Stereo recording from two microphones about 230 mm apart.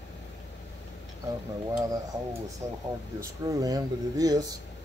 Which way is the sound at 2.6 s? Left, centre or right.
Centre.